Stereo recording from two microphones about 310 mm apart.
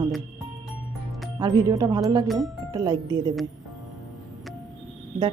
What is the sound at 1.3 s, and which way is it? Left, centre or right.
Speech, centre.